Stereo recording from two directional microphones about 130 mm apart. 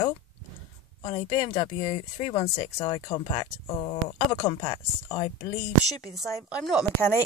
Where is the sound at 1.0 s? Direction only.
40° left (ahead or behind).